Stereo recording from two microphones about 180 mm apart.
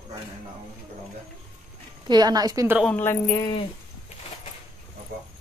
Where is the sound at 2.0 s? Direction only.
20° right (ahead or behind).